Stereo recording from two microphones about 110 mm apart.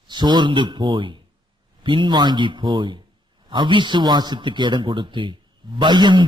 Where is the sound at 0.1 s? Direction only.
45° right (ahead or behind).